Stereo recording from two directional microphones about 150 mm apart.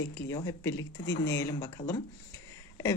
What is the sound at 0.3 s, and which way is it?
Speech, 20° left (ahead or behind).